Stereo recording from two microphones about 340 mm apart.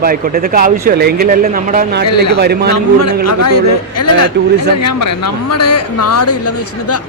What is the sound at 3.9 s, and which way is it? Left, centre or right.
Speech, left.